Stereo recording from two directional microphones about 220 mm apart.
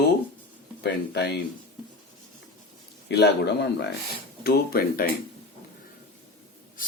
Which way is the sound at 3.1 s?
50° left (ahead or behind).